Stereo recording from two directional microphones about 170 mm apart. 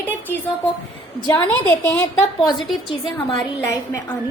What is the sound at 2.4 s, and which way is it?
Speech, 25° left (ahead or behind).